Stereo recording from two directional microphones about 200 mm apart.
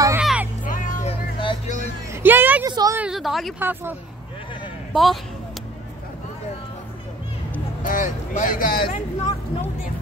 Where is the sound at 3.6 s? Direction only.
10° right (ahead or behind).